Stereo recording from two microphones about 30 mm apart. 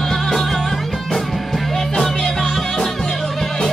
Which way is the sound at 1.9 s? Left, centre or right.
Centre.